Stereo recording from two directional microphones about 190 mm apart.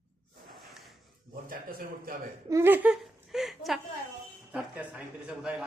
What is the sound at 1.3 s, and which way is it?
Speech, 50° right (ahead or behind).